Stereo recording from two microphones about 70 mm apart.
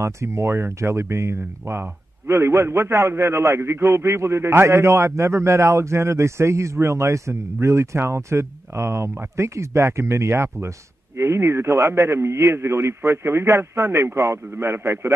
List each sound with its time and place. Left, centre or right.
0.0 s a man's voice: right